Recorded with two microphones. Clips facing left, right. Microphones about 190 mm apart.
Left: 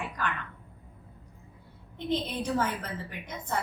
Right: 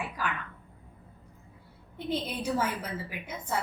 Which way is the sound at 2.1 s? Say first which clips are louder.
Left 1 dB; 10° right (ahead or behind).